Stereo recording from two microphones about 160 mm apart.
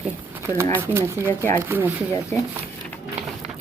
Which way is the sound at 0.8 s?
15° right (ahead or behind).